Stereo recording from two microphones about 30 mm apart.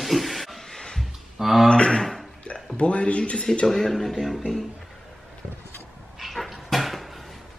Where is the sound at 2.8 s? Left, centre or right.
Left.